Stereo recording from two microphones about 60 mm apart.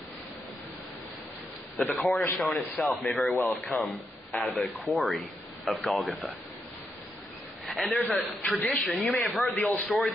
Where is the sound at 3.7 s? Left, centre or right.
Left.